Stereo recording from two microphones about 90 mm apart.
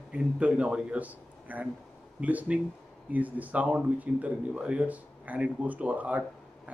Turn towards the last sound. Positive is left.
turn(degrees=-15)  # may be behind; listen again after turning